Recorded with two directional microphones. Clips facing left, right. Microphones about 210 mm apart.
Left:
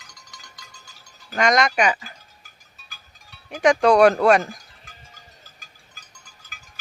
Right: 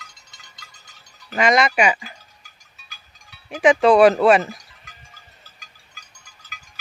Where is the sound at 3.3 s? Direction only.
Centre (ahead or behind).